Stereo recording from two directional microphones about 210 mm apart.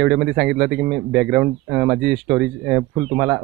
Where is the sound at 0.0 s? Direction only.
Centre (ahead or behind).